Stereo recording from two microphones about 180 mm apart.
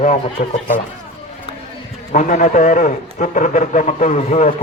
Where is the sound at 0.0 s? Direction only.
40° left (ahead or behind).